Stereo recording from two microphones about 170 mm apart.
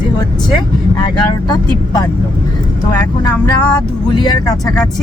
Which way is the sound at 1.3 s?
25° left (ahead or behind).